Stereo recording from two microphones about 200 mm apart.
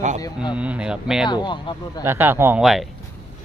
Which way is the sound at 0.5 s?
5° right (ahead or behind).